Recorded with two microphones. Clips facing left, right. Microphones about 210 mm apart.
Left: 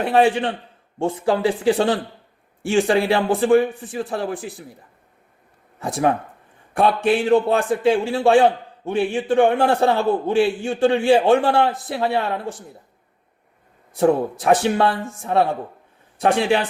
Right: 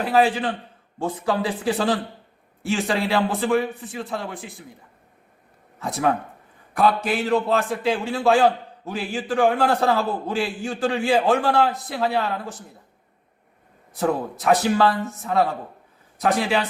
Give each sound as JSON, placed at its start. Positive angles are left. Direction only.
{"t": 0.0, "sound": "a man's voice", "side_deg": 30}
{"t": 5.8, "sound": "a man's voice", "side_deg": 30}
{"t": 13.9, "sound": "a man's voice", "side_deg": 30}